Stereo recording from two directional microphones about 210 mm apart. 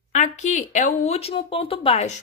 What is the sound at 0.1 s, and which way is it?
Speech, 35° left (ahead or behind).